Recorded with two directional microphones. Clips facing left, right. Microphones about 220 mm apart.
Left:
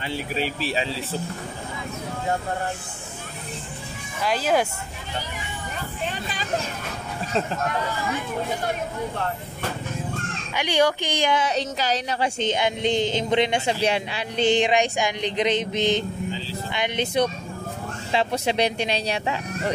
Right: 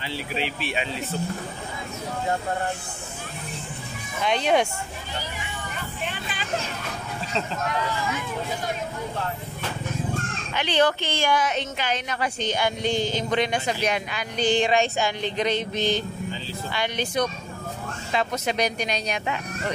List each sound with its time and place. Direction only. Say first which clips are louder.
0.0 s speech: left 2 dB; 45° left (ahead or behind)
4.2 s speech: even; 5° left (ahead or behind)
10.5 s speech: left 1 dB; 10° left (ahead or behind)
11.4 s speech: left 2 dB; 35° left (ahead or behind)